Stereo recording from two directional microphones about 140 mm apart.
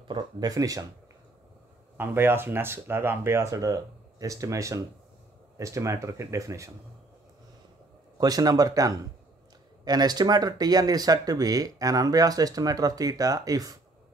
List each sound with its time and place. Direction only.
0.1 s speech: 30° right (ahead or behind)
2.0 s speech: 15° right (ahead or behind)
8.2 s speech: 25° right (ahead or behind)